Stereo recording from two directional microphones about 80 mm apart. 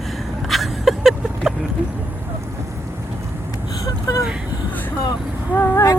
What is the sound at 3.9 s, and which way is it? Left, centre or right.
Vehicle, left.